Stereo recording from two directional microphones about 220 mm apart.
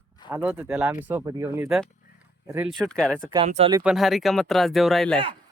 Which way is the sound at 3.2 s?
25° right (ahead or behind).